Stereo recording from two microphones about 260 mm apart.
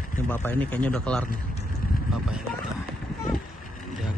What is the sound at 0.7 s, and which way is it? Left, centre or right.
Speech, centre.